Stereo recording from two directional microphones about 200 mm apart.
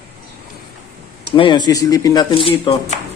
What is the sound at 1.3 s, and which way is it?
Speech, 25° left (ahead or behind).